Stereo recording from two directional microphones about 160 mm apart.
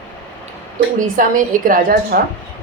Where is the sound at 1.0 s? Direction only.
55° right (ahead or behind).